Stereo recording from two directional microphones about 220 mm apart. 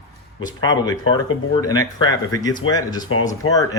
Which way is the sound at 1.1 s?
20° left (ahead or behind).